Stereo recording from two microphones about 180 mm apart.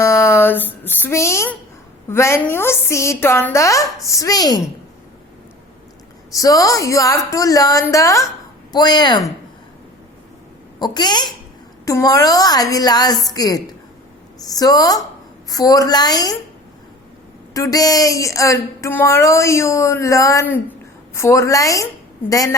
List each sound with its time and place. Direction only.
0.0 s speech: 15° left (ahead or behind)
6.3 s a woman's voice: 20° left (ahead or behind)
10.8 s a woman's voice: 25° left (ahead or behind)
17.5 s speech: 20° left (ahead or behind)